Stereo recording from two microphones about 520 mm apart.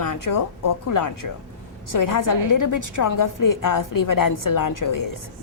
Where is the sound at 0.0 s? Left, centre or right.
Left.